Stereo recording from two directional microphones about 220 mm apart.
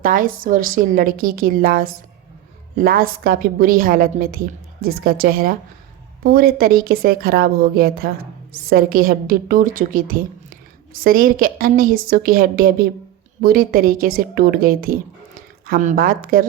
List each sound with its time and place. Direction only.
0.0 s a woman's voice: 40° right (ahead or behind)